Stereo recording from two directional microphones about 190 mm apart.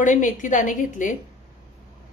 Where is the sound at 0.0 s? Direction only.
40° left (ahead or behind).